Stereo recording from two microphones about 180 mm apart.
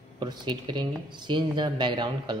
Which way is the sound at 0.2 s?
25° right (ahead or behind).